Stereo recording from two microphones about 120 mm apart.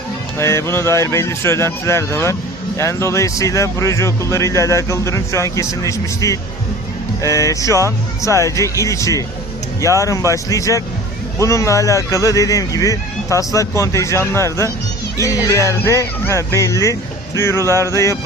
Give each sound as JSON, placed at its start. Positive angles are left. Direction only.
{"t": 0.3, "sound": "speech", "side_deg": 20}